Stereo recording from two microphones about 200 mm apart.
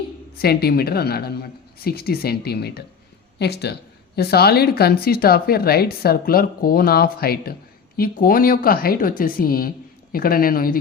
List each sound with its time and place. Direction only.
0.3 s a woman's voice: 50° left (ahead or behind)